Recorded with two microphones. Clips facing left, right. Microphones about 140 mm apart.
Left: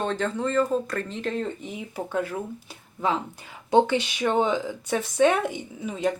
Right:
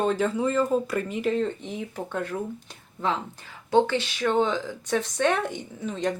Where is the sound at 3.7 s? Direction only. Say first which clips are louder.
Left 1 dB; 15° left (ahead or behind).